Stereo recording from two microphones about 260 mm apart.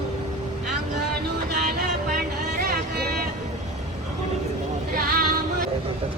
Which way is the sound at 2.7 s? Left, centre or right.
Right.